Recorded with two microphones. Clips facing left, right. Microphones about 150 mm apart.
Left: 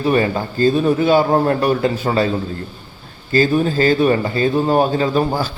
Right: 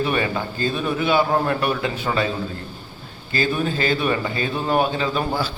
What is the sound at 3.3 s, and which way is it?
Speech, 40° left (ahead or behind).